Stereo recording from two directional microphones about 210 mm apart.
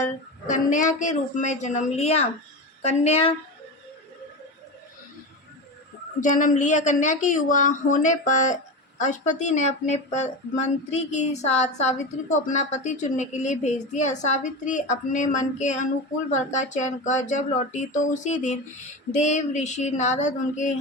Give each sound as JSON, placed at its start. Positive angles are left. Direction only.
{"t": 0.0, "sound": "a woman's voice", "side_deg": 35}
{"t": 6.1, "sound": "a woman's voice", "side_deg": 40}